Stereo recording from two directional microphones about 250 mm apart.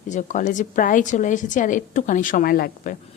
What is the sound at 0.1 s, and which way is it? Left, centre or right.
A woman's voice, left.